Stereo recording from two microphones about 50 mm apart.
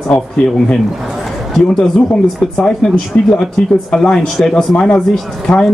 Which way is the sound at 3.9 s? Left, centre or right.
Centre.